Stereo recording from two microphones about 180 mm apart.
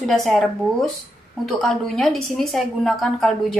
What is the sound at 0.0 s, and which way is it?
Speech, centre (ahead or behind).